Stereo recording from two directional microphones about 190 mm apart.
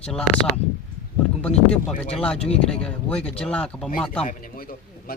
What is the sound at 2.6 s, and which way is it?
Speech, 5° left (ahead or behind).